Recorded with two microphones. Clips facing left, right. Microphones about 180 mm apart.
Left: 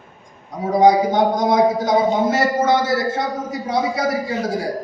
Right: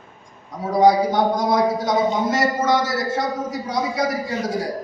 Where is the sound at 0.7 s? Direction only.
20° left (ahead or behind).